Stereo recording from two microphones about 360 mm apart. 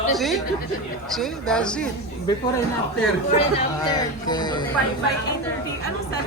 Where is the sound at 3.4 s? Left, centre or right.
Centre.